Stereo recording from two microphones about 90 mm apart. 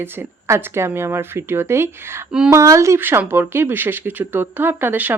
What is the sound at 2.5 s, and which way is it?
Speech, 35° right (ahead or behind).